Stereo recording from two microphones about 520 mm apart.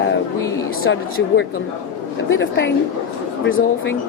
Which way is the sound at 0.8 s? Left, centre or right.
Left.